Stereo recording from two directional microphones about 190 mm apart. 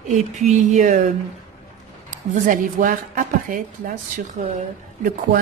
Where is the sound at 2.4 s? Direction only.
45° right (ahead or behind).